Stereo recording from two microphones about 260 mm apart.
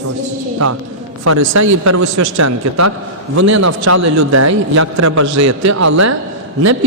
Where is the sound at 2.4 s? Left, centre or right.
Right.